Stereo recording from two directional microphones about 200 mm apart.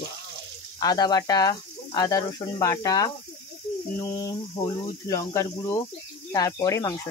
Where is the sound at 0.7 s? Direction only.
20° left (ahead or behind).